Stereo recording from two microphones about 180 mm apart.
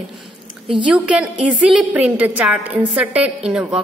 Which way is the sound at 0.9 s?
5° right (ahead or behind).